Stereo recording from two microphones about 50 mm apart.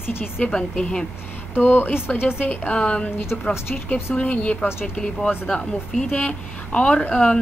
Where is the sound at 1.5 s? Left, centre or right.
Left.